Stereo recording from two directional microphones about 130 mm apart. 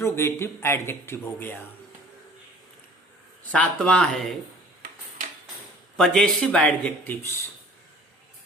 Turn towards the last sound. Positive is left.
turn(degrees=15)  # may be behind; listen again after turning